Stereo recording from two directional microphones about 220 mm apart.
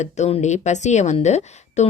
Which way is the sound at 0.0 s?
30° left (ahead or behind).